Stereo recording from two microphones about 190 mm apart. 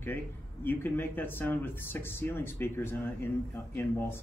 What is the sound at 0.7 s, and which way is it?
Speech, 10° left (ahead or behind).